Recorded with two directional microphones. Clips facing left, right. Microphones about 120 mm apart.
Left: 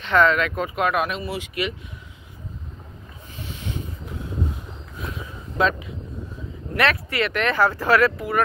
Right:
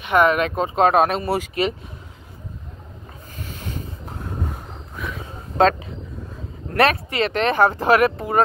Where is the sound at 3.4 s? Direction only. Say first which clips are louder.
Even; 45° right (ahead or behind).